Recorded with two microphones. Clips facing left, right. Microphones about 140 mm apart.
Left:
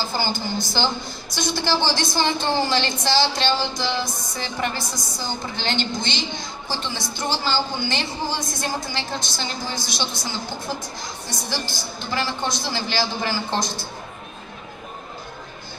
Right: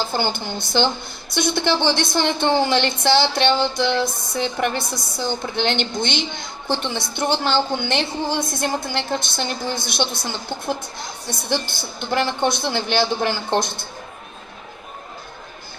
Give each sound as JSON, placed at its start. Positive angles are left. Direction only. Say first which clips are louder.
{"t": 0.0, "sound": "a woman's voice", "louder": "right 2 dB", "side_deg": -60}